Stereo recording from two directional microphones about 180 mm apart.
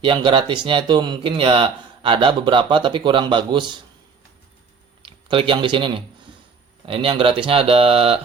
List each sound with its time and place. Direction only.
0.0 s speech: 25° right (ahead or behind)
5.0 s speech: 30° right (ahead or behind)